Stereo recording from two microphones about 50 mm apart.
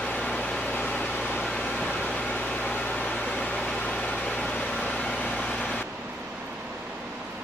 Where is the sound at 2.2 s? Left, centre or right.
Left.